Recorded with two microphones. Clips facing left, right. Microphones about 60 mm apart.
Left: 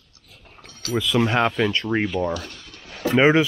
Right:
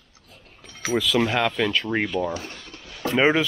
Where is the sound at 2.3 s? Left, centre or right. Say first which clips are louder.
Left 2 dB; right.